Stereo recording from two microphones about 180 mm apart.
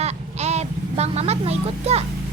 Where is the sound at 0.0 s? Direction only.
35° right (ahead or behind).